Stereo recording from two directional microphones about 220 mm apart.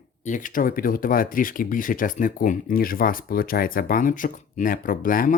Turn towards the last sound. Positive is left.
turn(degrees=40)  # may be behind; listen again after turning